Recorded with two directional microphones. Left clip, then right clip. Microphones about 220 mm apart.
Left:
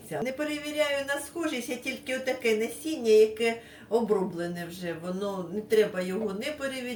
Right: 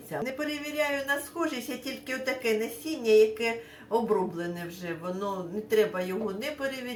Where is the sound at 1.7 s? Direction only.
Centre (ahead or behind).